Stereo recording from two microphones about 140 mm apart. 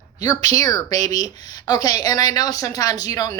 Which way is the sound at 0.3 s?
25° left (ahead or behind).